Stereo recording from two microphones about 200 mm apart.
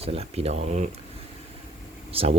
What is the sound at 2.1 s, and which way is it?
Speech, 30° right (ahead or behind).